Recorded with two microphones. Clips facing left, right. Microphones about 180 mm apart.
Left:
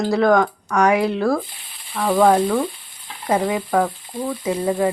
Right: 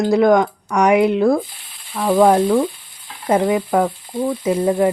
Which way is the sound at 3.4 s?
5° right (ahead or behind).